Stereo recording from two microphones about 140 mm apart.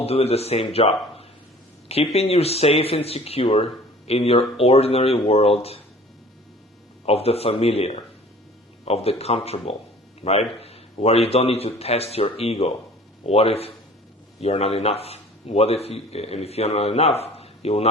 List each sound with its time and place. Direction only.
0.0 s speech: 45° left (ahead or behind)
7.0 s speech: 45° left (ahead or behind)